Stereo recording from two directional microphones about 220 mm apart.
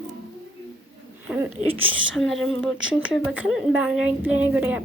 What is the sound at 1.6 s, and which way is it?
Speech, 65° right (ahead or behind).